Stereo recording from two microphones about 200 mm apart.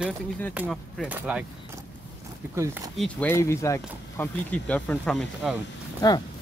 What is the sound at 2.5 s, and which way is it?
Speech, 15° right (ahead or behind).